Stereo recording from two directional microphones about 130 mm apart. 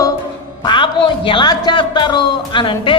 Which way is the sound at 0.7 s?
40° left (ahead or behind).